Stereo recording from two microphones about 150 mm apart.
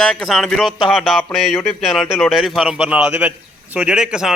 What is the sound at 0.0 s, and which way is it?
Speech, centre (ahead or behind).